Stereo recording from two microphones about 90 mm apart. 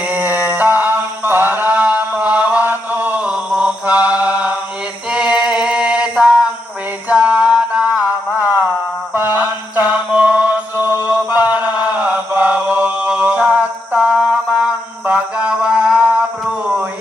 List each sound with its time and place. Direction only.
0.0 s a sound: 20° right (ahead or behind)
5.1 s a capella: 10° right (ahead or behind)
7.1 s mantra: 15° right (ahead or behind)